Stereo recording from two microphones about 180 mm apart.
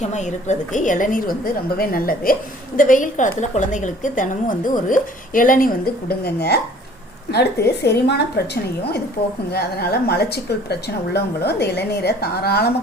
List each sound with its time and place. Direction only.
0.0 s a woman's voice: 40° left (ahead or behind); by 8.2 s 65° left (ahead or behind)
9.5 s a woman's voice: 60° left (ahead or behind)